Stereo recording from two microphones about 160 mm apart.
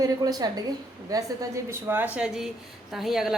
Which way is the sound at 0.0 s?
25° right (ahead or behind).